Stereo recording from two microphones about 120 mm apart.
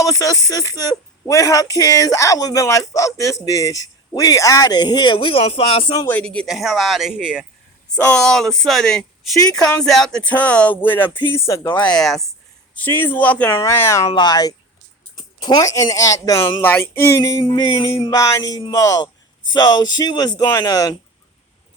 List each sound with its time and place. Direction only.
0.0 s speech: 30° left (ahead or behind); by 6.0 s 50° left (ahead or behind)
6.1 s speech: 10° left (ahead or behind); by 7.4 s 5° right (ahead or behind)
8.0 s speech: 5° left (ahead or behind); by 11.7 s 25° left (ahead or behind)
11.7 s speech: 10° left (ahead or behind)
12.7 s speech: 15° left (ahead or behind)
13.6 s speech: 25° left (ahead or behind)
14.1 s speech: 35° left (ahead or behind)
17.4 s music: 45° left (ahead or behind)
18.1 s speech: 30° left (ahead or behind)